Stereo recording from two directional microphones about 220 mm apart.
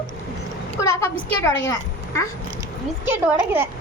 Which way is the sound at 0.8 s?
10° left (ahead or behind).